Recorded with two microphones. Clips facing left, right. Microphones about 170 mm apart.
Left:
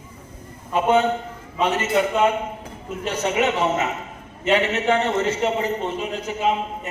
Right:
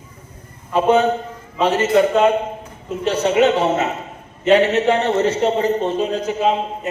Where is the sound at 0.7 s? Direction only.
35° right (ahead or behind).